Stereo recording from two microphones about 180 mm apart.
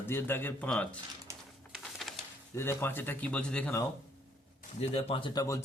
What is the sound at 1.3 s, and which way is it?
Typewriter, 15° right (ahead or behind).